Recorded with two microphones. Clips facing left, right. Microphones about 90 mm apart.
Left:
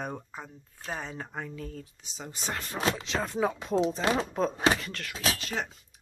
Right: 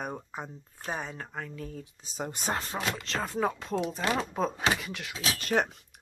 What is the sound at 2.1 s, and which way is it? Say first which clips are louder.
Speech: right 5 dB; 50° right (ahead or behind).